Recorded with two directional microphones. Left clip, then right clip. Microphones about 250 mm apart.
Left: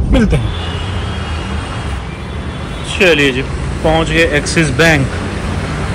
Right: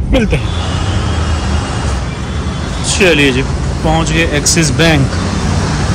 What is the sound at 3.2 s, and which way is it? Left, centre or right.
Speech, right.